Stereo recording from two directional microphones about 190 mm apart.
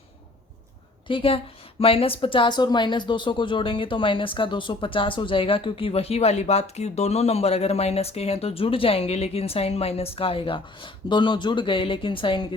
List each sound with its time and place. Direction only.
1.0 s speech: 30° left (ahead or behind)